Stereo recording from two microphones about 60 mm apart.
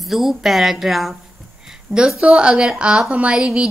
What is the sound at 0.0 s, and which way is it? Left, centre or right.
A woman's voice, centre.